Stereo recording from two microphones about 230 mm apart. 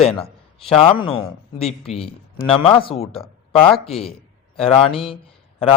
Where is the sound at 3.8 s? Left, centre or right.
Left.